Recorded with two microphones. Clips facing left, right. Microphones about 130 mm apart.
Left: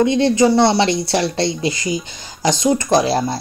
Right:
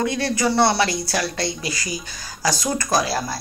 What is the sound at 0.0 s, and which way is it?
Speech, 20° left (ahead or behind).